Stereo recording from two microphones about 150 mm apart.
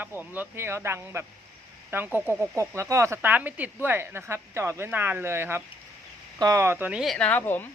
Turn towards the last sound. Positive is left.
turn(degrees=15)  # may be behind; listen again after turning